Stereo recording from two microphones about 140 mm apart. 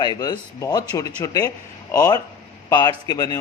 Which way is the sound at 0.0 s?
30° left (ahead or behind).